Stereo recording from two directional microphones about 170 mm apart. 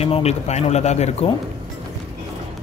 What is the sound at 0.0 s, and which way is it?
Speech, 35° left (ahead or behind).